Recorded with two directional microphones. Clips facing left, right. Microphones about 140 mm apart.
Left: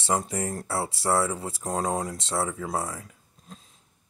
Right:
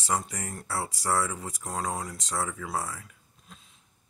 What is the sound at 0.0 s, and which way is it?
Speech, 30° left (ahead or behind).